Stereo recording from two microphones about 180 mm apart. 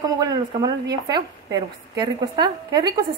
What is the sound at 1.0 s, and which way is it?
A woman's voice, 25° right (ahead or behind).